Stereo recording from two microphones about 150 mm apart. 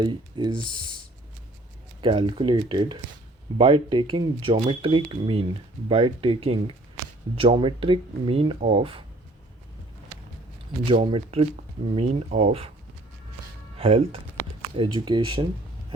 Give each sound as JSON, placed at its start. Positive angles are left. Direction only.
{"t": 0.0, "sound": "speech", "side_deg": -30}
{"t": 2.0, "sound": "speech", "side_deg": -35}
{"t": 10.8, "sound": "speech", "side_deg": -35}
{"t": 13.7, "sound": "speech", "side_deg": -40}